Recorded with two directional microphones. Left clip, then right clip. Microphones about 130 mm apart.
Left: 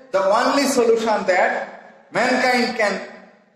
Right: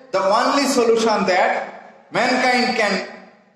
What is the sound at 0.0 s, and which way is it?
A man's voice, 40° right (ahead or behind).